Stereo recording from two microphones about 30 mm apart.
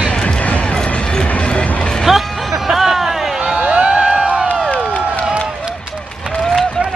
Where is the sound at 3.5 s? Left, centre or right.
Right.